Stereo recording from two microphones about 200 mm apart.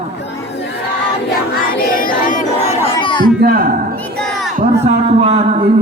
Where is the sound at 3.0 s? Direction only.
25° left (ahead or behind).